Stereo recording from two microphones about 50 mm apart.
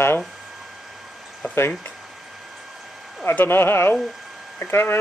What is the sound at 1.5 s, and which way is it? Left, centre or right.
Speech, left.